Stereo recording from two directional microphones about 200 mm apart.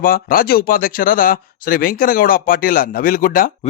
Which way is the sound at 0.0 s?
45° left (ahead or behind).